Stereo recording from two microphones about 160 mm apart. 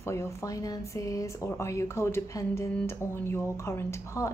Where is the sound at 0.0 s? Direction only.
15° left (ahead or behind).